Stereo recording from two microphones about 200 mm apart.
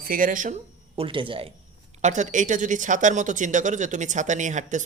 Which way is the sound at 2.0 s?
35° right (ahead or behind).